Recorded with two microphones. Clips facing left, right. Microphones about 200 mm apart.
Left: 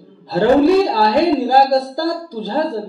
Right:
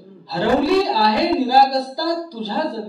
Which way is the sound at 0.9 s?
50° left (ahead or behind).